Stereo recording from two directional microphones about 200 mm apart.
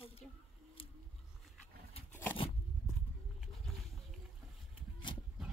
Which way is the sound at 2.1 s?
10° left (ahead or behind).